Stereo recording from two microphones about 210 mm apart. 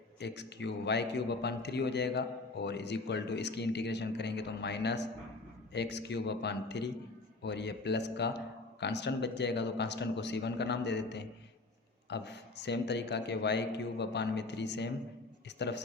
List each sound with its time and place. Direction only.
0.2 s a man's voice: 55° left (ahead or behind)